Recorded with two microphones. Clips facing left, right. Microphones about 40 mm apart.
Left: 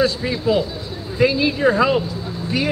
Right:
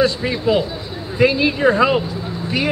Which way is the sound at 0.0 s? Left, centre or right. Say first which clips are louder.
Right 2 dB; centre.